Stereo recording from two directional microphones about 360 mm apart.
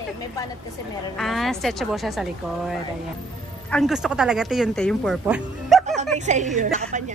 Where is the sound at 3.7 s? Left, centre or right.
Centre.